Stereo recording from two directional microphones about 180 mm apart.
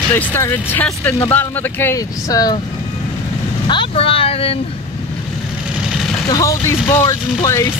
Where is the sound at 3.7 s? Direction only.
30° left (ahead or behind).